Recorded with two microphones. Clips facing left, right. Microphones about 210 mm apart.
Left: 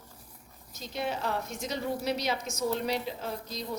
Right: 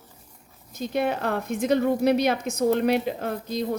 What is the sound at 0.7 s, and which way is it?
A woman's voice, 55° right (ahead or behind).